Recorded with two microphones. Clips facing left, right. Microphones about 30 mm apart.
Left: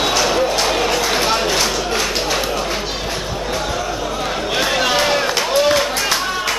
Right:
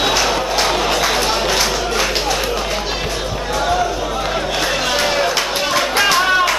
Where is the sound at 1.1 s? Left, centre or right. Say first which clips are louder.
Even; centre.